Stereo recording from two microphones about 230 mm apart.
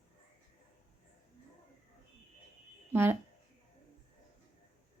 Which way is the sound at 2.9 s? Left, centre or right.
Centre.